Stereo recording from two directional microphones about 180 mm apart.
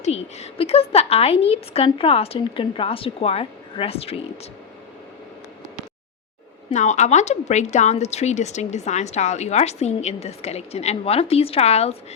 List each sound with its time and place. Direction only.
0.0 s a woman's voice: 35° left (ahead or behind)
6.7 s a woman's voice: 40° left (ahead or behind)